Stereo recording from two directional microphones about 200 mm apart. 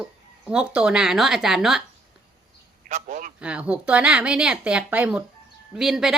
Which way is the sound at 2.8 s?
40° right (ahead or behind).